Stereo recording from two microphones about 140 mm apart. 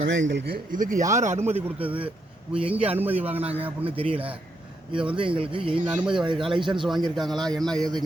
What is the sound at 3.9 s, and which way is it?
A man's voice, 40° right (ahead or behind).